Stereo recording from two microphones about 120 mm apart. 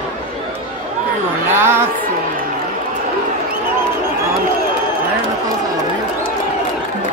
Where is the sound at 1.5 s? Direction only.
20° right (ahead or behind).